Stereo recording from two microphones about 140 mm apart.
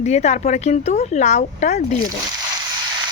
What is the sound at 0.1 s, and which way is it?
Speech, 55° left (ahead or behind).